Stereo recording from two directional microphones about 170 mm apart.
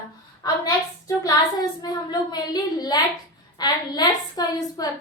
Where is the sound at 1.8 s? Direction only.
25° left (ahead or behind).